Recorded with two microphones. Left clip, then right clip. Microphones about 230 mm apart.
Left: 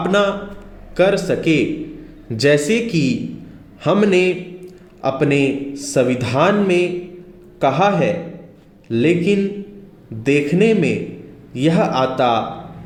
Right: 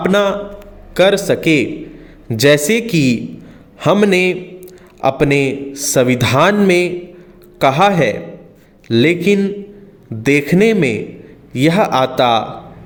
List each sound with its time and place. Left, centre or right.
0.0 s a man's voice: right